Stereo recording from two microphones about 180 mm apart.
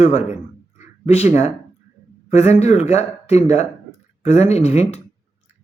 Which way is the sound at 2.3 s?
35° left (ahead or behind).